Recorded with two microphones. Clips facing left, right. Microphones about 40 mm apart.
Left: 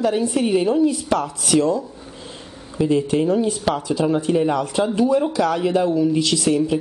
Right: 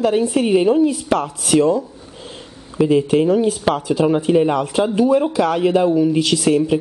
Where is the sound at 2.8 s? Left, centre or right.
Centre.